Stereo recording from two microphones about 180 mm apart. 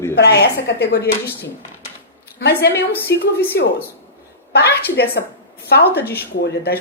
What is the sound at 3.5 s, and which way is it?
Speech, 65° left (ahead or behind).